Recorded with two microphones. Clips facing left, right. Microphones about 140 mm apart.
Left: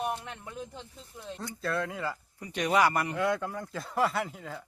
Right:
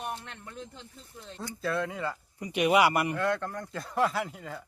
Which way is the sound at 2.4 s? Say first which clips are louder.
Right 2 dB; 15° right (ahead or behind).